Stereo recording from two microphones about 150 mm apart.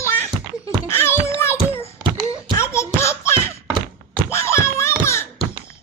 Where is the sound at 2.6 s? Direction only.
20° left (ahead or behind).